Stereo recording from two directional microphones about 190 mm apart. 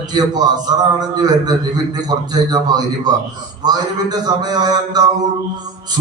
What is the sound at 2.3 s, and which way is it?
A man's voice, 20° right (ahead or behind).